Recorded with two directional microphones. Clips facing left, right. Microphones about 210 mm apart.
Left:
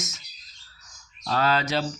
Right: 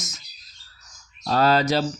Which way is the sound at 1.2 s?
40° right (ahead or behind).